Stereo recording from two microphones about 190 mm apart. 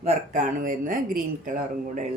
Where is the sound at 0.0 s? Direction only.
40° right (ahead or behind).